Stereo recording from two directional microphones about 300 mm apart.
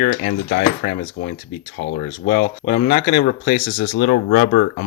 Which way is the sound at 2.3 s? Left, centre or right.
Left.